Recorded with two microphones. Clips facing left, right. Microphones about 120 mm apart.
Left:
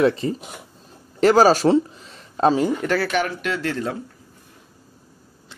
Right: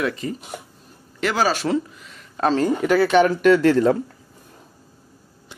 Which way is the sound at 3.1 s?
35° right (ahead or behind).